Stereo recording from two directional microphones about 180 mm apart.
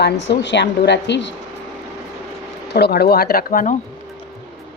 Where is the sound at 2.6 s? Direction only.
65° left (ahead or behind).